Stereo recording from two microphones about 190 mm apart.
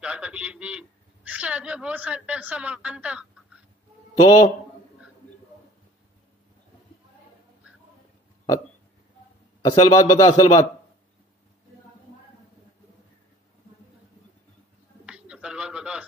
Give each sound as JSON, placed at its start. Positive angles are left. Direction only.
{"t": 0.0, "sound": "a man's voice", "side_deg": -5}
{"t": 4.2, "sound": "a man's voice", "side_deg": 15}
{"t": 9.6, "sound": "a man's voice", "side_deg": 20}
{"t": 15.0, "sound": "bird", "side_deg": -5}